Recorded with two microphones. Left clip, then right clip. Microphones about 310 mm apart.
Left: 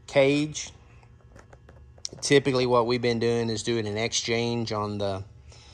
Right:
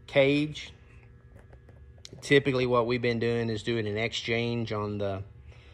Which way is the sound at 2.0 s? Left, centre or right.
Centre.